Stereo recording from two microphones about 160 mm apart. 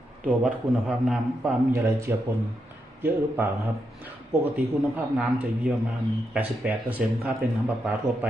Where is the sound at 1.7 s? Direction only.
15° right (ahead or behind).